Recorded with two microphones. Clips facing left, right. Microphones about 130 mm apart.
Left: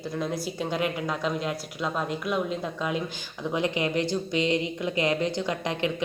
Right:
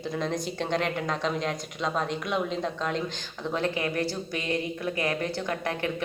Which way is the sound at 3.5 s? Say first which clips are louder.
Left 2 dB; 15° left (ahead or behind).